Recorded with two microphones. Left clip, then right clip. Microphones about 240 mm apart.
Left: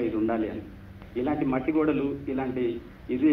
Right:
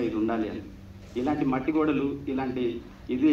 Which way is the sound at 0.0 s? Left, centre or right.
Right.